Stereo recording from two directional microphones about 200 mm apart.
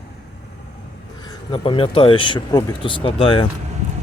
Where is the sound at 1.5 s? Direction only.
25° left (ahead or behind).